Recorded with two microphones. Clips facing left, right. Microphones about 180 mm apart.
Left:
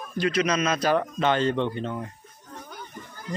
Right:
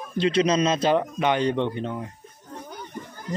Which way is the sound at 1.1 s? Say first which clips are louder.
Right 1 dB; 15° right (ahead or behind).